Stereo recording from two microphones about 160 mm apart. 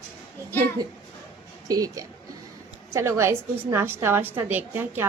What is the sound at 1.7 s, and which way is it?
A woman's voice, 20° right (ahead or behind).